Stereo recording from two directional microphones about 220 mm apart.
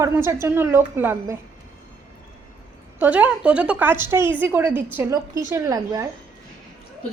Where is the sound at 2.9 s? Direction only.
5° right (ahead or behind).